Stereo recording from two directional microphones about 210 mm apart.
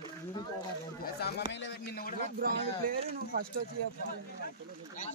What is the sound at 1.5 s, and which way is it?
Speech, 55° left (ahead or behind).